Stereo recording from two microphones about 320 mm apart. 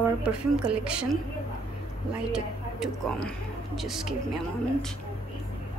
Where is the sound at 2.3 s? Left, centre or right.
Centre.